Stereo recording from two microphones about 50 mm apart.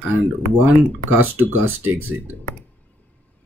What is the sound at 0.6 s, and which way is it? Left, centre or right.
Speech, right.